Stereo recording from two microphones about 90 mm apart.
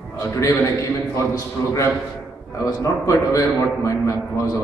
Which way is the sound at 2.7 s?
35° left (ahead or behind).